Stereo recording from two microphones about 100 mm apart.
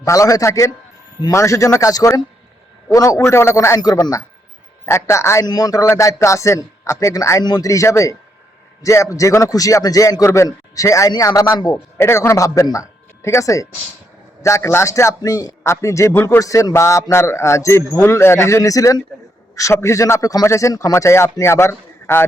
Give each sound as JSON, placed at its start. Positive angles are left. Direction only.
{"t": 0.0, "sound": "a man's voice", "side_deg": 35}
{"t": 3.8, "sound": "a man's voice", "side_deg": 40}
{"t": 5.5, "sound": "a man's voice", "side_deg": 40}
{"t": 5.8, "sound": "a man's voice", "side_deg": 30}